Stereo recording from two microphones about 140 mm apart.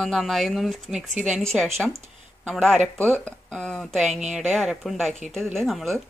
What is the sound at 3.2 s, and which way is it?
Speech, 5° left (ahead or behind).